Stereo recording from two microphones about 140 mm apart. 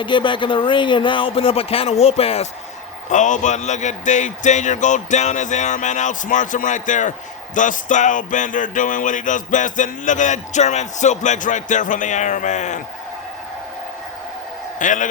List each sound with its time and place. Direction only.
0.0 s speech: 35° left (ahead or behind)
3.1 s a sound: 60° left (ahead or behind)
14.8 s a man's voice: 65° left (ahead or behind)